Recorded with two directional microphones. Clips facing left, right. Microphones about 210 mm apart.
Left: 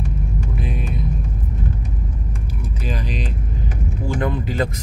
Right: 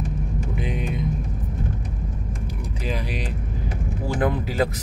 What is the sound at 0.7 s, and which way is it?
Vehicle, 20° right (ahead or behind).